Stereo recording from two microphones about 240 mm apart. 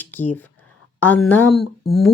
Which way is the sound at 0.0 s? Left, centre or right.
Centre.